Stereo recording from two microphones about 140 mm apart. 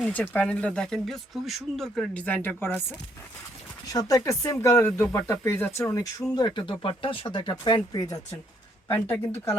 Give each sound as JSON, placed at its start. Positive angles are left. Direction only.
{"t": 0.1, "sound": "speech", "side_deg": 10}
{"t": 3.8, "sound": "speech", "side_deg": 25}
{"t": 6.3, "sound": "speech", "side_deg": 30}
{"t": 8.9, "sound": "speech", "side_deg": 20}